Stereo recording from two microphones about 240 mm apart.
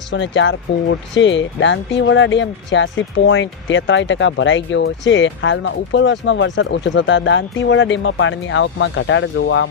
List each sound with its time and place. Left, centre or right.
0.1 s speech: left